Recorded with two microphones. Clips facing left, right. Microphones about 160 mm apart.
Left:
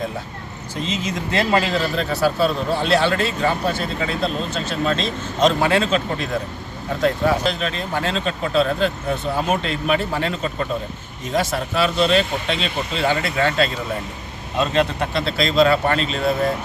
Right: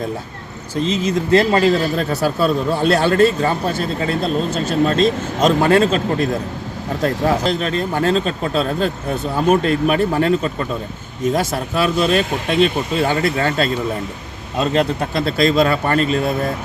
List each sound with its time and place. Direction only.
0.9 s speech: 35° right (ahead or behind)
11.3 s speech: 45° right (ahead or behind)